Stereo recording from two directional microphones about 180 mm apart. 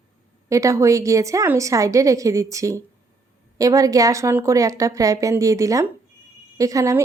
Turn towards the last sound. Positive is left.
turn(degrees=-15)  # may be behind; listen again after turning